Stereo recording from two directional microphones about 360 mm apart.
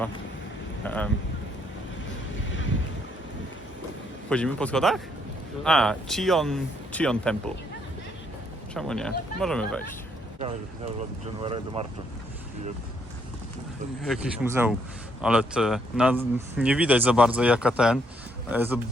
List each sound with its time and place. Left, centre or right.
0.9 s speech: centre
4.3 s speech: centre
8.7 s speech: centre
11.4 s speech: centre
14.1 s speech: centre